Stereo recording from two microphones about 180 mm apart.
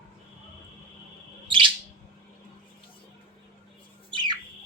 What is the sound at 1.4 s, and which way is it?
Bird, 25° right (ahead or behind).